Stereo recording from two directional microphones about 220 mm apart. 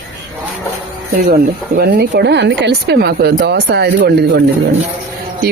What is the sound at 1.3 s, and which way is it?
Speech, 45° right (ahead or behind).